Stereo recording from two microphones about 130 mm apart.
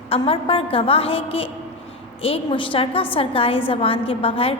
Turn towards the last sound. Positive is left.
turn(degrees=45)  # may be behind; listen again after turning